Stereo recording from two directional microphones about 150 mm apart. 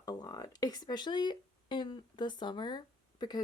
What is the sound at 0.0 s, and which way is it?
Speech, 25° left (ahead or behind).